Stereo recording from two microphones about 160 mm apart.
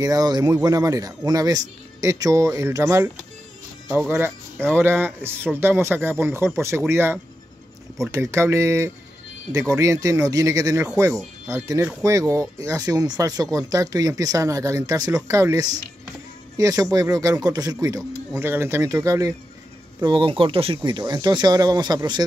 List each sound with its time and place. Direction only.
0.0 s speech: 25° right (ahead or behind)
4.1 s speech: 15° right (ahead or behind)